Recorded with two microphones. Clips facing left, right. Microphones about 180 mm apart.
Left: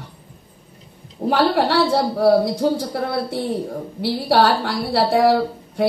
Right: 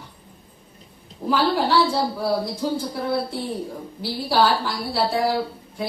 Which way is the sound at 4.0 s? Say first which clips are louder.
Left 4 dB; 70° left (ahead or behind).